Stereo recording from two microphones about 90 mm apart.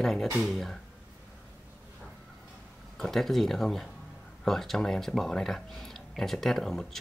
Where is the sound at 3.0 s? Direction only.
5° left (ahead or behind).